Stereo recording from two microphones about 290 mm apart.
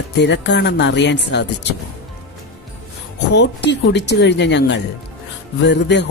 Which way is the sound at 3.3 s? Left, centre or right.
Left.